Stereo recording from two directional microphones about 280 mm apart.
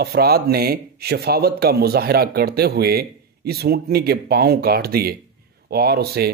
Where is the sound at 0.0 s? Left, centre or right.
Right.